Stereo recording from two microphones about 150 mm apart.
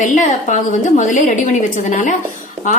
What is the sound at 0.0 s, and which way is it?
Speech, 55° left (ahead or behind).